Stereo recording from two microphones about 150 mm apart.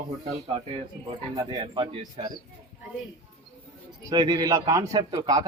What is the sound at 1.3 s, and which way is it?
Speech, 30° right (ahead or behind).